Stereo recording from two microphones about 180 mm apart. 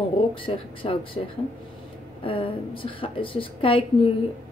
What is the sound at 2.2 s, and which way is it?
A woman's voice, 30° left (ahead or behind).